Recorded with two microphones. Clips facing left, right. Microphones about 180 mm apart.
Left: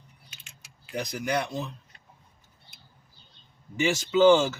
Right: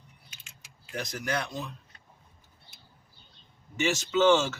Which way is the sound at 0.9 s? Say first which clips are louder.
Left 4 dB; 15° left (ahead or behind).